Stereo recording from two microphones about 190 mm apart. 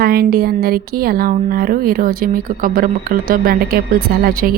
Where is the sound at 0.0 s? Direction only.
55° right (ahead or behind).